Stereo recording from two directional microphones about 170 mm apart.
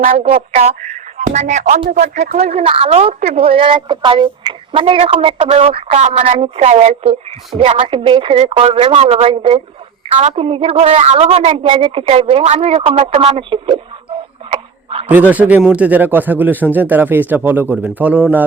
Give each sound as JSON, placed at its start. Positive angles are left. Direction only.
{"t": 0.0, "sound": "speech", "side_deg": -50}
{"t": 0.5, "sound": "speech", "side_deg": -40}
{"t": 14.5, "sound": "a sound", "side_deg": -35}
{"t": 15.0, "sound": "a man's voice", "side_deg": -10}